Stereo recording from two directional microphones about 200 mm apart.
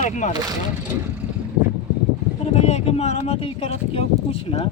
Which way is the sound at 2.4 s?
30° left (ahead or behind).